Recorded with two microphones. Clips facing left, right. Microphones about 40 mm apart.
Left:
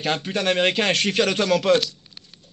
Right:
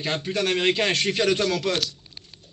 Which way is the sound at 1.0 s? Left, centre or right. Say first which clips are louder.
Left 2 dB; left.